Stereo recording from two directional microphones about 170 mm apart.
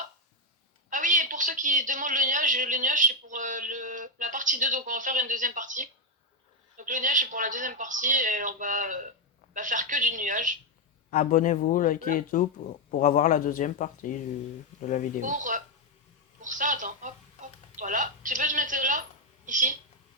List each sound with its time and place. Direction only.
0.9 s a man's voice: 50° right (ahead or behind)
11.1 s speech: 50° left (ahead or behind)
15.2 s a man's voice: 50° right (ahead or behind)